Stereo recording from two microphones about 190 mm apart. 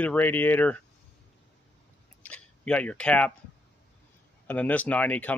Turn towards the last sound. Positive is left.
turn(degrees=10)  # may be behind; listen again after turning